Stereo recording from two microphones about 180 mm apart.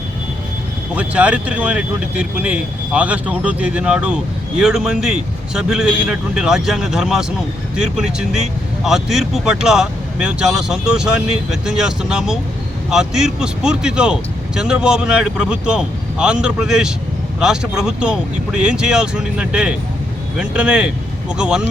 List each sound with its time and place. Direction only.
0.9 s speech: 5° right (ahead or behind)